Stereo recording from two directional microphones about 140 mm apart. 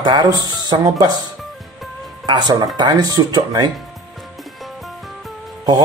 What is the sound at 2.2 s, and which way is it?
Speech, 30° right (ahead or behind).